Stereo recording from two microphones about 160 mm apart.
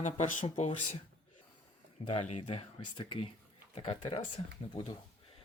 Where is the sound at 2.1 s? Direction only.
40° left (ahead or behind).